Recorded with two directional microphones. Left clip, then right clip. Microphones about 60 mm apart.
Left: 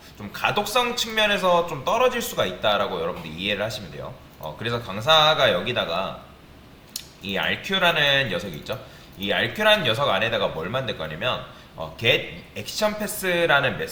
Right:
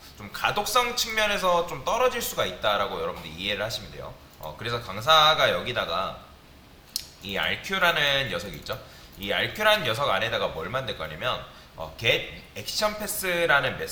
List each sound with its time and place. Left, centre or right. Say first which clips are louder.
0.2 s a man's voice: left 3 dB; right
6.9 s typing: left 2 dB; right
7.7 s a man's voice: left 3 dB; right